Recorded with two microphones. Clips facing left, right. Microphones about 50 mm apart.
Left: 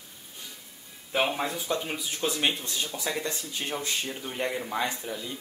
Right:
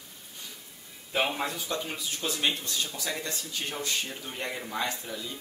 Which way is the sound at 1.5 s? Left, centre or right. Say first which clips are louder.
Left 3 dB; centre.